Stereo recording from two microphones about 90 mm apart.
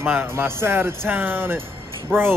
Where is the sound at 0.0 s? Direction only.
25° right (ahead or behind).